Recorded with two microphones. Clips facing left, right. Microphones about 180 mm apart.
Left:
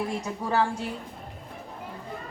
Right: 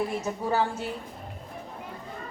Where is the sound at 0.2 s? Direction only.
5° right (ahead or behind).